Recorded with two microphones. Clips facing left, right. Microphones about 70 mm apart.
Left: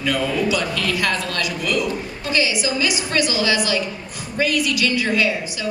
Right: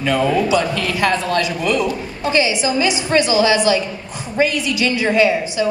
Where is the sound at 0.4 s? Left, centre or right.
Right.